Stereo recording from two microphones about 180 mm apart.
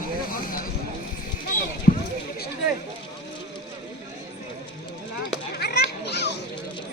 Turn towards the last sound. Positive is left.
turn(degrees=70)  # may be behind; listen again after turning